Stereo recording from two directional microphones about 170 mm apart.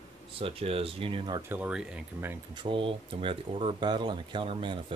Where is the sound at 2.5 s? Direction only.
30° right (ahead or behind).